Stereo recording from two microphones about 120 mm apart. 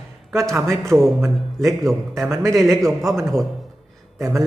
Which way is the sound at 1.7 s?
Centre (ahead or behind).